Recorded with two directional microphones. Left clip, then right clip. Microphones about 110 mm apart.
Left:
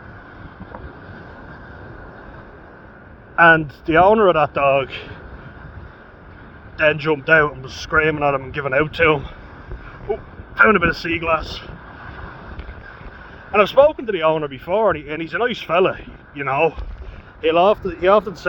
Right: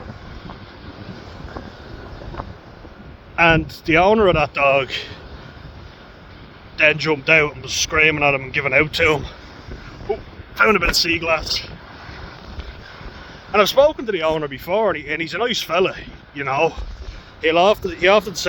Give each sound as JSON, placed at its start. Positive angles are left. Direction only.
{"t": 3.3, "sound": "speech", "side_deg": -30}
{"t": 6.7, "sound": "speech", "side_deg": -25}
{"t": 10.1, "sound": "a sound", "side_deg": -5}
{"t": 10.5, "sound": "a man's voice", "side_deg": -25}
{"t": 11.0, "sound": "speech", "side_deg": -35}
{"t": 13.5, "sound": "speech", "side_deg": -20}